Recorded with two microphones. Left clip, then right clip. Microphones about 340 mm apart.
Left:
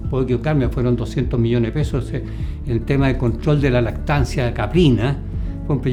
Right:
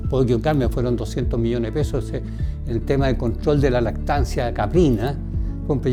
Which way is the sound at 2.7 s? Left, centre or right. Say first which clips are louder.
Left 1 dB; right.